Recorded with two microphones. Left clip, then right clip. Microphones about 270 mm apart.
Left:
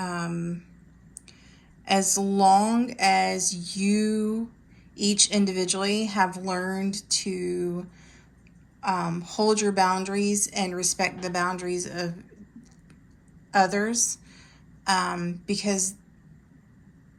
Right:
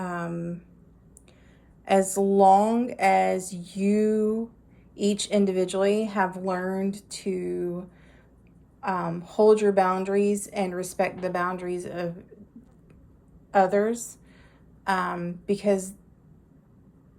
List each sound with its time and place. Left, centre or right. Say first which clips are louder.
0.0 s a sound: even; centre
1.8 s a woman's voice: right 2 dB; centre
13.5 s a woman's voice: right 1 dB; centre